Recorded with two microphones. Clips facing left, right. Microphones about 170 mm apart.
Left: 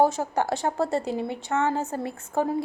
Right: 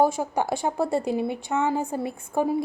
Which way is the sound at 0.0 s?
15° right (ahead or behind).